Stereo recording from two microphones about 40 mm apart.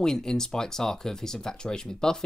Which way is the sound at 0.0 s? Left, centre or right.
Centre.